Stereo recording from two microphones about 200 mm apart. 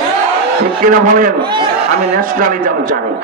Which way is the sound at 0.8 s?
45° right (ahead or behind).